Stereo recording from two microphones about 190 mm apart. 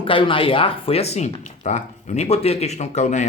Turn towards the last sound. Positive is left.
turn(degrees=40)  # may be behind; listen again after turning